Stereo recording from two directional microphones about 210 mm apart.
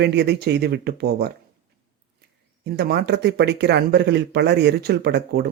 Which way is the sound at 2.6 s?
50° right (ahead or behind).